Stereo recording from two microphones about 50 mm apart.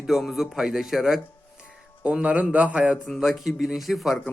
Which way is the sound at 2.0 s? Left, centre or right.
Right.